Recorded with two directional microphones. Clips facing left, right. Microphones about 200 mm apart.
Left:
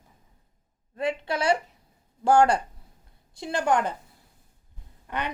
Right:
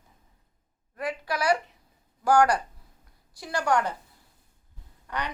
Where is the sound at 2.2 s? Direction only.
25° left (ahead or behind).